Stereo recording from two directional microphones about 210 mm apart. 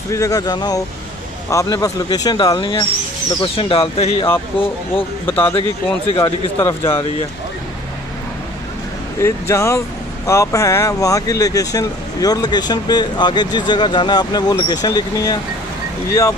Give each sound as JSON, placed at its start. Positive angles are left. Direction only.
{"t": 0.1, "sound": "speech", "side_deg": 15}
{"t": 5.2, "sound": "speech", "side_deg": 10}
{"t": 5.5, "sound": "speech", "side_deg": 25}
{"t": 9.2, "sound": "speech", "side_deg": 15}